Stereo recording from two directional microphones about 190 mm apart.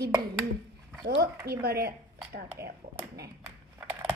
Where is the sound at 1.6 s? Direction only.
55° right (ahead or behind).